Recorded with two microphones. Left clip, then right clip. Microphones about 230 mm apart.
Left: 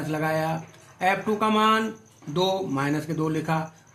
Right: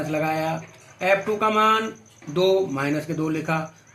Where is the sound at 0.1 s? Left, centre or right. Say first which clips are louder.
Even; left.